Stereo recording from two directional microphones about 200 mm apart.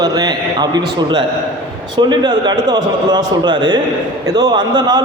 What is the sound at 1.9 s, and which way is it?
A man's voice, 20° right (ahead or behind).